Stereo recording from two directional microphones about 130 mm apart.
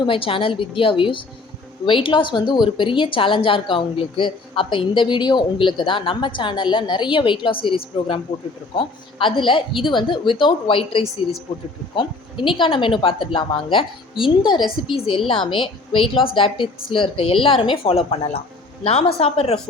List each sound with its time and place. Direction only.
0.0 s a woman's voice: 45° left (ahead or behind)